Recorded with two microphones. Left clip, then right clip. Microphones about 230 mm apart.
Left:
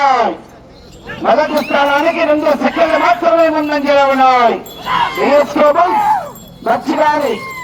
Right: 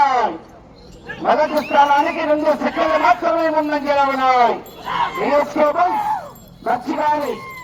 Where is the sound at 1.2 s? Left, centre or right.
Left.